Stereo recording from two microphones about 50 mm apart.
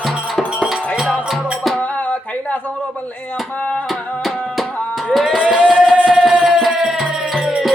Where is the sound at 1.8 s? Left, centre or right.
Left.